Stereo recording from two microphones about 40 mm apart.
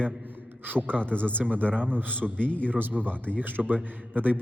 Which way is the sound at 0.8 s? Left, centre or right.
Left.